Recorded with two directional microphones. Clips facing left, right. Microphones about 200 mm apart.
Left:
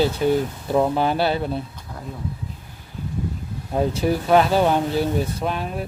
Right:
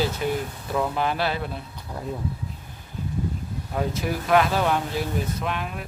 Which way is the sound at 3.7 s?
30° left (ahead or behind).